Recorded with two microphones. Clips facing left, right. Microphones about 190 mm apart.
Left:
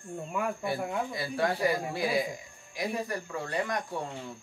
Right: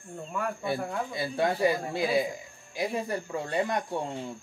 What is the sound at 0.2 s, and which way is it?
Speech, 10° left (ahead or behind).